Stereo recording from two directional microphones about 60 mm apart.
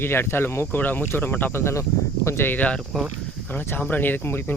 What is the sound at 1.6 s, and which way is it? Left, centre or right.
Speech, left.